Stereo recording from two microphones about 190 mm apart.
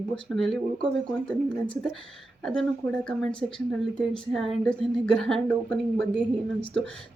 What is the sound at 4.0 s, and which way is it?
A woman's voice, centre (ahead or behind).